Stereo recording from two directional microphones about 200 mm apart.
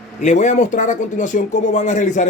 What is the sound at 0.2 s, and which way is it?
Speech, 35° left (ahead or behind).